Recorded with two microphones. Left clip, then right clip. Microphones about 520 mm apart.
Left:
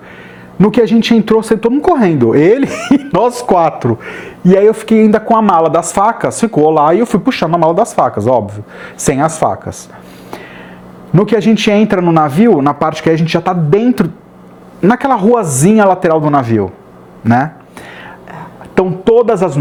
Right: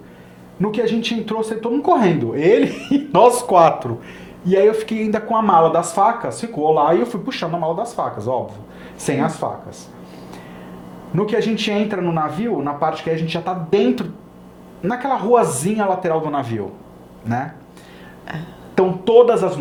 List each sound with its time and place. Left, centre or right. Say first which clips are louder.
0.6 s speech: left 9 dB; left
11.2 s speech: left 8 dB; left
18.7 s a woman's voice: left 4 dB; left